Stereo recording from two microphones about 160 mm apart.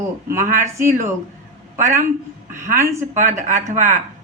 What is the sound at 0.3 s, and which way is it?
Speech, 15° right (ahead or behind).